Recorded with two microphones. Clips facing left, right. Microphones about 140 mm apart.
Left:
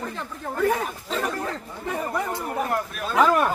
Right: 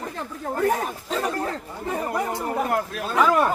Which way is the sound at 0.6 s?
40° right (ahead or behind).